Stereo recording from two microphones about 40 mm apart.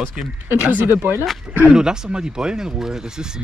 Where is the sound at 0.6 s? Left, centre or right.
Right.